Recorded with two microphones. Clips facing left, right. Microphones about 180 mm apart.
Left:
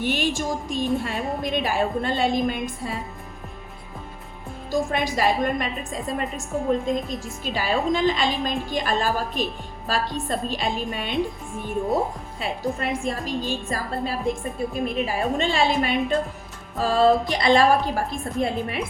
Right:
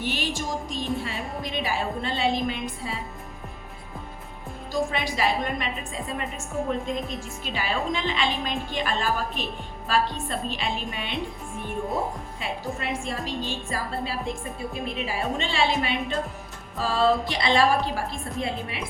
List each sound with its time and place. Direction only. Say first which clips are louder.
0.0 s a woman's voice: left 5 dB; 50° left (ahead or behind)
4.7 s a woman's voice: left 3 dB; 45° left (ahead or behind)
12.4 s a woman's voice: left 6 dB; 40° left (ahead or behind)